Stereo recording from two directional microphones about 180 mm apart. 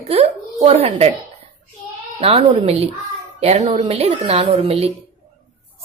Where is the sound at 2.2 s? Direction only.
35° right (ahead or behind).